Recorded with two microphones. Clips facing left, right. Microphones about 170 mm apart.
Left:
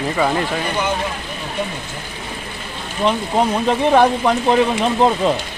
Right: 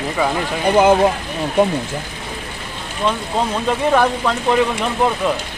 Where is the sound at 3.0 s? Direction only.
20° left (ahead or behind).